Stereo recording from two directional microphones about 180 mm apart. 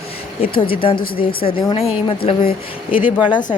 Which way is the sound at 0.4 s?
30° left (ahead or behind).